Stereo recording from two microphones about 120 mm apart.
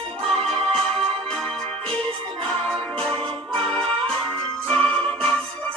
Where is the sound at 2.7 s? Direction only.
5° left (ahead or behind).